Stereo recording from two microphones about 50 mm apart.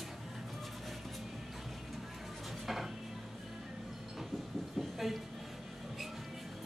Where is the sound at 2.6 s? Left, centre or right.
Centre.